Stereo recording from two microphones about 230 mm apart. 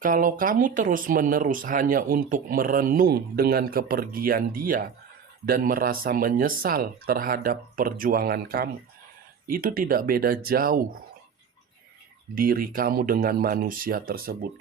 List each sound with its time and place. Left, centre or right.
0.0 s speech: right
12.3 s speech: right